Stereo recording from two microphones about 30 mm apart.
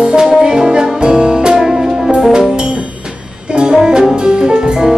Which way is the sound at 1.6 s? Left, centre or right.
Centre.